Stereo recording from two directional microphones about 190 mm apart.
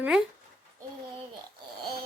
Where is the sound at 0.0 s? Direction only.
5° right (ahead or behind).